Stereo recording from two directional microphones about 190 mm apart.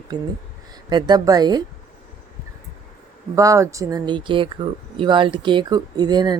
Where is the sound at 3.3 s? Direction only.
15° right (ahead or behind).